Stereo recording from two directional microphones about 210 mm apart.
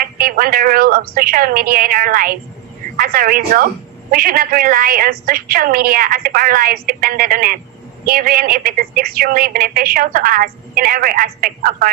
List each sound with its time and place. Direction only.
0.0 s a woman's voice: 45° right (ahead or behind)